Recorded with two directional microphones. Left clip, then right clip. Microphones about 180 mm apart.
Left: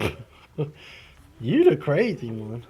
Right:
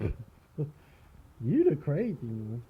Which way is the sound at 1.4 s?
20° right (ahead or behind).